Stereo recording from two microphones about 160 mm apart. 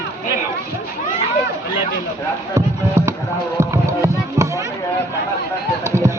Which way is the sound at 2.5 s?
20° right (ahead or behind).